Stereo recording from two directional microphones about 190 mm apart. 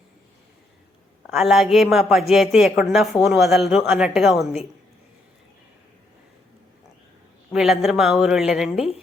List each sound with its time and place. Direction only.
1.3 s a woman's voice: centre (ahead or behind)
7.5 s a woman's voice: centre (ahead or behind)
8.7 s speech: 30° left (ahead or behind)